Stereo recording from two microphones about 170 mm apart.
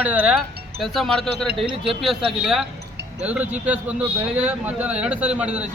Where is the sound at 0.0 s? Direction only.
10° right (ahead or behind).